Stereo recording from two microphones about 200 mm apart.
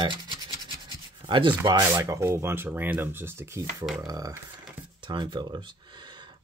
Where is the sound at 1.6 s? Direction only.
15° right (ahead or behind).